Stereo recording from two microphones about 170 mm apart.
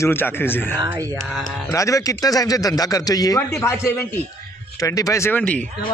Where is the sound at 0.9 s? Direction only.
20° right (ahead or behind).